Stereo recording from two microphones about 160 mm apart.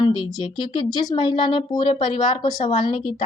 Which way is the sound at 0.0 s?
30° left (ahead or behind).